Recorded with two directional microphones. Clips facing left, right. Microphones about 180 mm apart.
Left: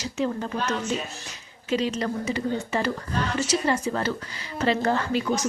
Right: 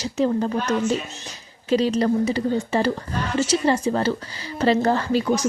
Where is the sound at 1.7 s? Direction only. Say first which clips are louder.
Right 6 dB; 35° right (ahead or behind).